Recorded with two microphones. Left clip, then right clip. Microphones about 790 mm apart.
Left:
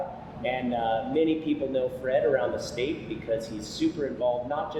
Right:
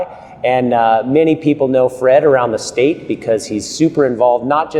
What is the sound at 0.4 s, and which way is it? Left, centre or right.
A man's voice, right.